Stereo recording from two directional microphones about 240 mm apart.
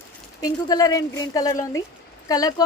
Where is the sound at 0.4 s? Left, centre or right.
Centre.